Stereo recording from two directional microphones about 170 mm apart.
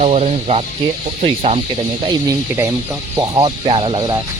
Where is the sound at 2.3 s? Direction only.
15° right (ahead or behind).